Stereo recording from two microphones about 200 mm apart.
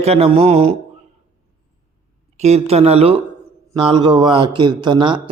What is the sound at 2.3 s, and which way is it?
A man's voice, 35° right (ahead or behind).